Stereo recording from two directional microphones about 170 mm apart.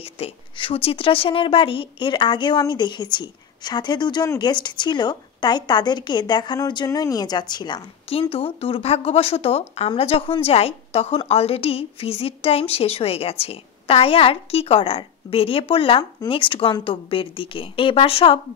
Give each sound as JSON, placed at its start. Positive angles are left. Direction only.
{"t": 0.0, "sound": "a woman's voice", "side_deg": 35}